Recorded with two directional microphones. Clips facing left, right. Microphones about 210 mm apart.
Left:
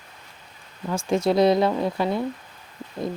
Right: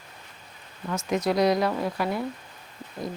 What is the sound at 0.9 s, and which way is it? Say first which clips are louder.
Speech: left 4 dB; 30° left (ahead or behind).